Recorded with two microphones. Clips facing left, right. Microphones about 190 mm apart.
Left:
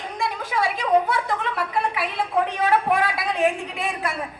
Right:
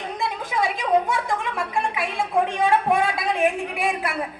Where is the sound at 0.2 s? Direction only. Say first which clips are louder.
Left 1 dB; 20° right (ahead or behind).